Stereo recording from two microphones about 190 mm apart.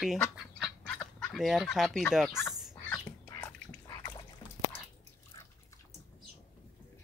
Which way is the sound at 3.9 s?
15° left (ahead or behind).